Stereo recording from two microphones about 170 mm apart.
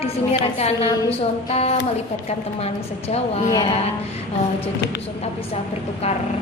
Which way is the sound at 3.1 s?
40° left (ahead or behind).